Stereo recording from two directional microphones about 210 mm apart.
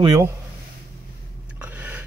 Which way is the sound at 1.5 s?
5° right (ahead or behind).